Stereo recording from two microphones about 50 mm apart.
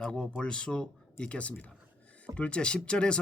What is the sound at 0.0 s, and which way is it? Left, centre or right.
Speech, centre.